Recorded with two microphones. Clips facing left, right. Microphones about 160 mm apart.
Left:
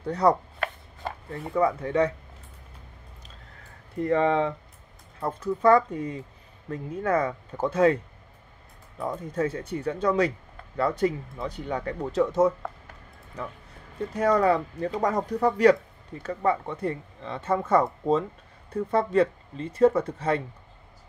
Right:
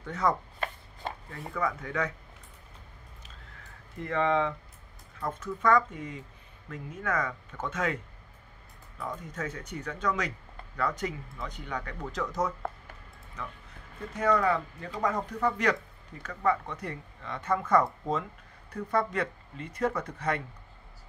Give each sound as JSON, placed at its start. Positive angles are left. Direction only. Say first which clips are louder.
{"t": 0.0, "sound": "speech", "louder": "left 7 dB", "side_deg": 35}
{"t": 1.5, "sound": "speech", "louder": "left 8 dB", "side_deg": 30}
{"t": 4.0, "sound": "speech", "louder": "left 5 dB", "side_deg": 35}
{"t": 14.1, "sound": "speech", "louder": "left 4 dB", "side_deg": 35}